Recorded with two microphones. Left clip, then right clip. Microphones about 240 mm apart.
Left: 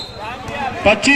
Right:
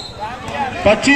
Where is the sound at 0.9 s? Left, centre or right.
Left.